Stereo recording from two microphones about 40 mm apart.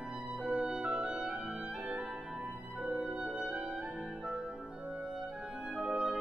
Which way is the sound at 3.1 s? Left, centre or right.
Right.